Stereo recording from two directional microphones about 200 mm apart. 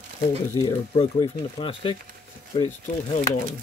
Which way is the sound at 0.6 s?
25° left (ahead or behind).